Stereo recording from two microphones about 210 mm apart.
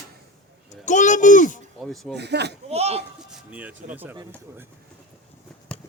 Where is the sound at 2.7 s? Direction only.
30° right (ahead or behind).